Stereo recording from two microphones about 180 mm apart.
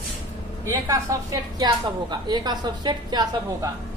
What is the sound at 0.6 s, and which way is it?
A woman's voice, 20° right (ahead or behind).